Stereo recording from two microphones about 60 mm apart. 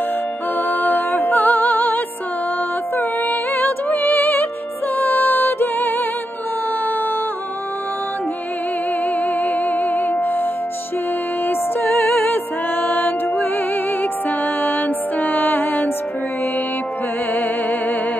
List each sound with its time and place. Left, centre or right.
0.6 s music: left
3.0 s music: left
9.2 s music: left
14.6 s music: left
17.3 s music: left